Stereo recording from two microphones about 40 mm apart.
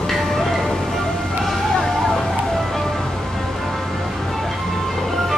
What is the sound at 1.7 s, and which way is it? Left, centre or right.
Music, centre.